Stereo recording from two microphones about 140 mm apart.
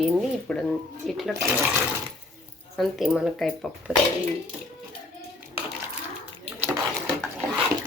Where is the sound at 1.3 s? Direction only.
15° right (ahead or behind).